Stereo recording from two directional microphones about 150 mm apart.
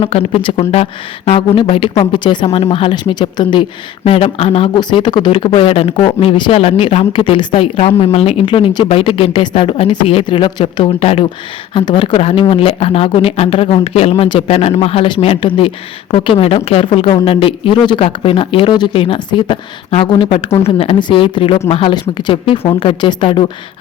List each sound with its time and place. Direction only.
0.0 s speech: 40° left (ahead or behind)